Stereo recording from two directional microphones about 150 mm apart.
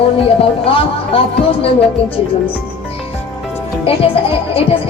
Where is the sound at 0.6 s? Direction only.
40° left (ahead or behind).